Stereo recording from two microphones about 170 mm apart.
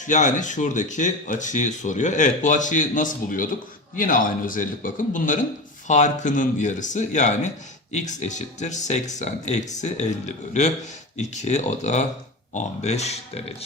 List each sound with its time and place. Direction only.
0.0 s speech: 45° left (ahead or behind)